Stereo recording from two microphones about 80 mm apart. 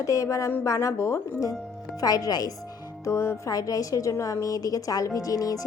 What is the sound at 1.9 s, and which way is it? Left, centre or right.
Speech, left.